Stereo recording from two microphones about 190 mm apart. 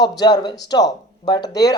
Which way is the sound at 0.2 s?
20° left (ahead or behind).